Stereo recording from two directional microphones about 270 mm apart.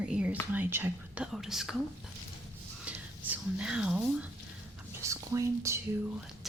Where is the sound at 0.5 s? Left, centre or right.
Centre.